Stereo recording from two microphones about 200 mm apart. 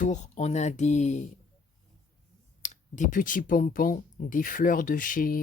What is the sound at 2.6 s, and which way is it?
Speech, 35° left (ahead or behind).